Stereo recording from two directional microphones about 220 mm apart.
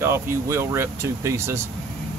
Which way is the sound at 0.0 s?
10° right (ahead or behind).